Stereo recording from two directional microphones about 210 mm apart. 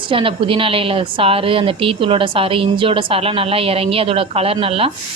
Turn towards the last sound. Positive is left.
turn(degrees=-25)  # may be behind; listen again after turning